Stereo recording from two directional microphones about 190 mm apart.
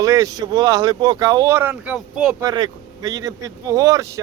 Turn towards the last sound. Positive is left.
turn(degrees=-15)  # may be behind; listen again after turning